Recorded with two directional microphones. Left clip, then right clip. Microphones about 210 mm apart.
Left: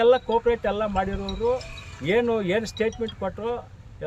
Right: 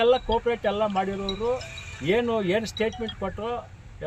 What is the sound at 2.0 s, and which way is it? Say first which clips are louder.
Speech: left 2 dB; 5° left (ahead or behind).